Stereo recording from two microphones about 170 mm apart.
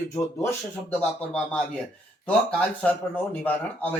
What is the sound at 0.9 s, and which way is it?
Speech, 10° left (ahead or behind).